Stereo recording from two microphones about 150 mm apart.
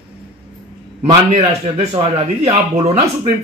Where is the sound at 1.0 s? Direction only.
45° right (ahead or behind).